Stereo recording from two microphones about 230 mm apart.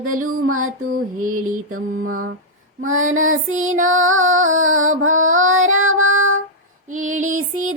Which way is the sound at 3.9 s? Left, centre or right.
Right.